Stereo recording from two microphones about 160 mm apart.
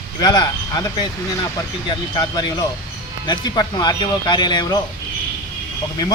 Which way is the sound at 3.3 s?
25° left (ahead or behind).